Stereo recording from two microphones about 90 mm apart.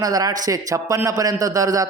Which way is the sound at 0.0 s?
45° right (ahead or behind).